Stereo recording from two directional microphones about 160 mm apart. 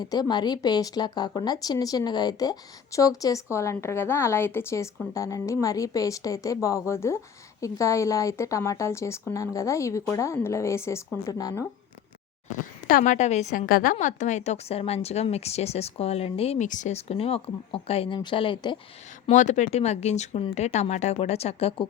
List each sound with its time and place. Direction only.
0.0 s speech: 25° left (ahead or behind)
12.9 s speech: 55° left (ahead or behind)
13.9 s speech: 50° left (ahead or behind); by 18.8 s 30° left (ahead or behind)
19.3 s speech: 50° left (ahead or behind)